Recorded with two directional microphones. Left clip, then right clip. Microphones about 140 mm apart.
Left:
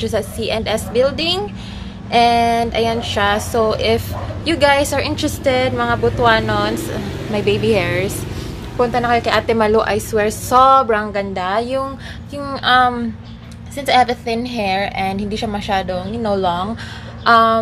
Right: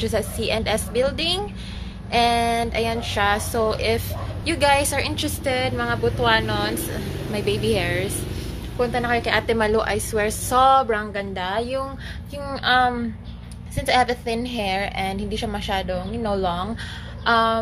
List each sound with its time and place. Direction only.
0.0 s a woman's voice: 15° left (ahead or behind)
17.2 s speech: 25° left (ahead or behind)